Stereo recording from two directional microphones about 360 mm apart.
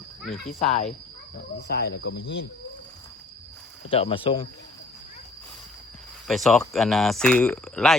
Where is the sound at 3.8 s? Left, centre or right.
Centre.